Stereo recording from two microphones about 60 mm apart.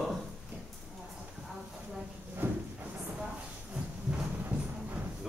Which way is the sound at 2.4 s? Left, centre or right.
Right.